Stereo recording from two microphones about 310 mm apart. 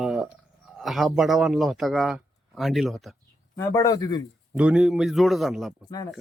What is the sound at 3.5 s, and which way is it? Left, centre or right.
Speech, centre.